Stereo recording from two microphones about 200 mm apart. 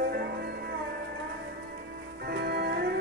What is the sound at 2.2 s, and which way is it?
Music, 55° right (ahead or behind).